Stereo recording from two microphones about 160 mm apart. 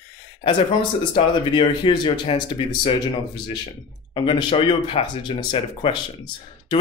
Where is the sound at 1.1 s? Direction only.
30° left (ahead or behind).